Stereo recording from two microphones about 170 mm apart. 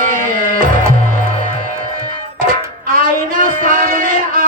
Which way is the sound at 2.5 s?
55° right (ahead or behind).